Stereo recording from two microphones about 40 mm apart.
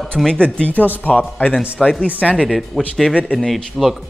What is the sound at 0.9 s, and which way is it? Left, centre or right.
Speech, left.